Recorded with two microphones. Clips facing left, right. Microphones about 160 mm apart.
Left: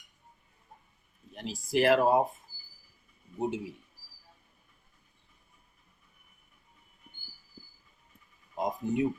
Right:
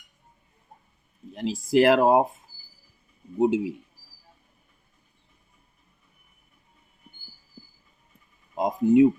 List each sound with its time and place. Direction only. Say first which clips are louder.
1.4 s speech: right 8 dB; 90° right
3.3 s speech: right 11 dB; 90° right
8.5 s speech: right 11 dB; 90° right